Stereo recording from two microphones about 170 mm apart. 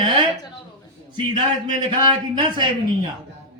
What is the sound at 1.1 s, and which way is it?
Speech, 25° right (ahead or behind).